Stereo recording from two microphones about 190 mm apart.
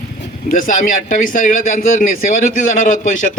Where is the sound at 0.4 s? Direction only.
45° left (ahead or behind).